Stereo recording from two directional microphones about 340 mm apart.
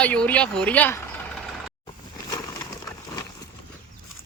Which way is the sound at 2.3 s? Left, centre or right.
Centre.